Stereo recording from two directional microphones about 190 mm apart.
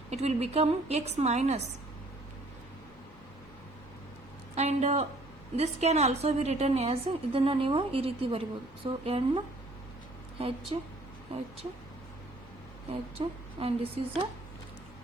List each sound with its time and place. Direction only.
0.1 s a woman's voice: 35° right (ahead or behind)
4.5 s a woman's voice: 35° right (ahead or behind)
10.4 s a woman's voice: 30° right (ahead or behind)
12.9 s a woman's voice: 30° right (ahead or behind)